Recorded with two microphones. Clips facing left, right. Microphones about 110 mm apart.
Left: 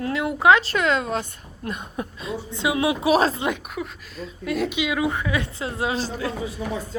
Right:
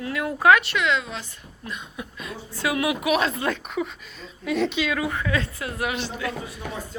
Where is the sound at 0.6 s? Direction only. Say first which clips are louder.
Left 2 dB; 40° left (ahead or behind).